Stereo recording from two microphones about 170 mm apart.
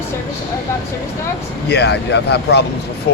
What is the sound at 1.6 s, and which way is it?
Speech, 80° left.